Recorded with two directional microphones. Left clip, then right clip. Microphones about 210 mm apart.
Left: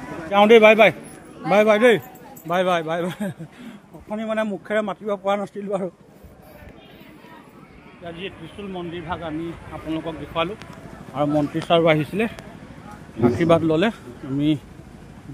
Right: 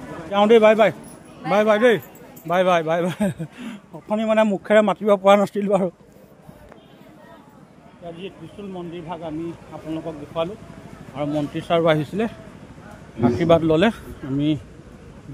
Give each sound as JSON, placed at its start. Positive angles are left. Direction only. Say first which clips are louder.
{"t": 0.3, "sound": "a man's voice", "louder": "left 2 dB", "side_deg": 0}
{"t": 2.4, "sound": "a man's voice", "louder": "right 3 dB", "side_deg": -15}
{"t": 8.0, "sound": "speech", "louder": "left 2 dB", "side_deg": 10}
{"t": 11.8, "sound": "a man's voice", "louder": "left 1 dB", "side_deg": 0}